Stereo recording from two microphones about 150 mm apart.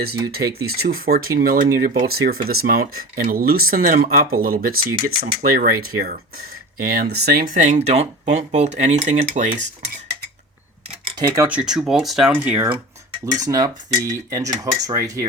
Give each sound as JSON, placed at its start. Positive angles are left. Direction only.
{"t": 0.3, "sound": "speech", "side_deg": -90}
{"t": 2.0, "sound": "speech", "side_deg": -90}
{"t": 7.8, "sound": "speech", "side_deg": -45}
{"t": 11.0, "sound": "tick-tock", "side_deg": -35}
{"t": 11.3, "sound": "speech", "side_deg": -15}
{"t": 13.4, "sound": "speech", "side_deg": -25}